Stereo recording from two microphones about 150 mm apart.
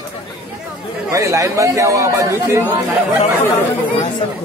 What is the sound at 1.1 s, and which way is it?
Speech, 20° right (ahead or behind).